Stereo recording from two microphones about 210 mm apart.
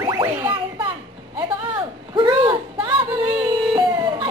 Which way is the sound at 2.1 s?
20° right (ahead or behind).